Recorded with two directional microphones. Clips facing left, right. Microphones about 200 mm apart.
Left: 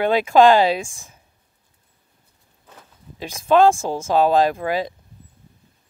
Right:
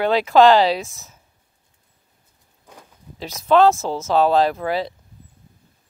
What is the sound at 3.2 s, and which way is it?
Speech, 10° left (ahead or behind).